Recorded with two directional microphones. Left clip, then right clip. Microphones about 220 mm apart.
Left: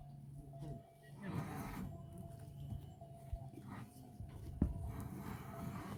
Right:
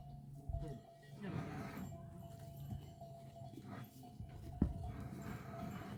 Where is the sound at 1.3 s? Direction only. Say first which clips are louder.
Left 1 dB; 50° left (ahead or behind).